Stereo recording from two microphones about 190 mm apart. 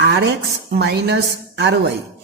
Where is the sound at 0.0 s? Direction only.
60° right (ahead or behind).